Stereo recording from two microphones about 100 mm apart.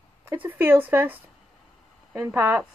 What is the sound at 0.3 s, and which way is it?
A woman's voice, 20° right (ahead or behind).